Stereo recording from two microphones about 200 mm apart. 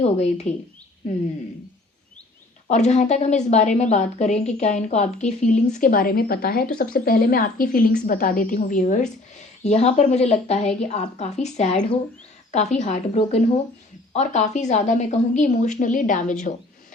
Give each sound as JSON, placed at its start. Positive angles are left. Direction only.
{"t": 0.0, "sound": "a woman's voice", "side_deg": 35}
{"t": 2.6, "sound": "a woman's voice", "side_deg": 35}